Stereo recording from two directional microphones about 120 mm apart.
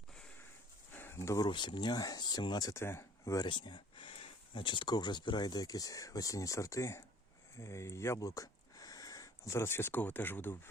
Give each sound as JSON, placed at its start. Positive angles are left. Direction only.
{"t": 0.9, "sound": "a sound", "side_deg": 20}
{"t": 1.5, "sound": "speech", "side_deg": 40}
{"t": 3.4, "sound": "speech", "side_deg": 40}